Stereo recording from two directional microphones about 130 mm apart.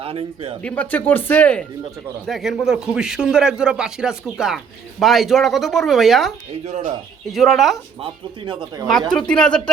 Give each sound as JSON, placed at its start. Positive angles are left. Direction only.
{"t": 0.0, "sound": "speech", "side_deg": -45}
{"t": 0.6, "sound": "speech", "side_deg": 10}
{"t": 2.2, "sound": "a man's voice", "side_deg": 0}
{"t": 6.7, "sound": "speech", "side_deg": -55}
{"t": 7.3, "sound": "a man's voice", "side_deg": 0}
{"t": 8.0, "sound": "speech", "side_deg": -40}
{"t": 8.9, "sound": "speech", "side_deg": 5}